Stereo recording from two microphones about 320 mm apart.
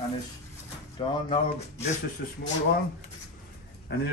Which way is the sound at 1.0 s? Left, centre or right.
Centre.